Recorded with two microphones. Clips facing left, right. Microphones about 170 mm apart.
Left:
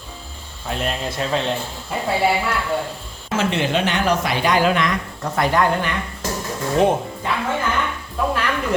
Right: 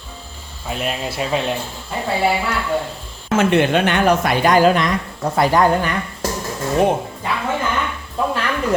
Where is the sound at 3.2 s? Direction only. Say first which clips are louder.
Right 6 dB; 55° right (ahead or behind); by 5.9 s 35° right (ahead or behind).